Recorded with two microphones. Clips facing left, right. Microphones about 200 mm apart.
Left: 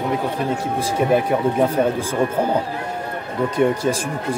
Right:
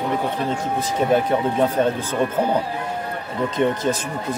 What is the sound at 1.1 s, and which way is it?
Speech, 10° left (ahead or behind).